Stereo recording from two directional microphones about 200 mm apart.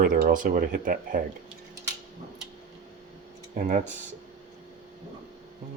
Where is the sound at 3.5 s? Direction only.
40° right (ahead or behind).